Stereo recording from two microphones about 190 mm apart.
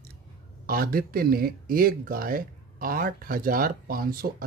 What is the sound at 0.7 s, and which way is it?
Speech, 50° right (ahead or behind).